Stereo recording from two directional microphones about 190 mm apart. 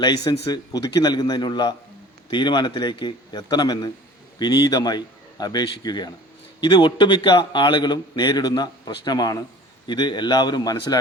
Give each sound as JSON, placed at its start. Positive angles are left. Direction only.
{"t": 0.4, "sound": "a man's voice", "side_deg": 20}